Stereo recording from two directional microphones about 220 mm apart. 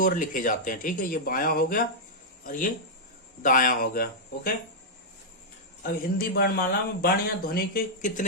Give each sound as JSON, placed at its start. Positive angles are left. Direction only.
{"t": 0.0, "sound": "speech", "side_deg": 40}
{"t": 6.3, "sound": "speech", "side_deg": 45}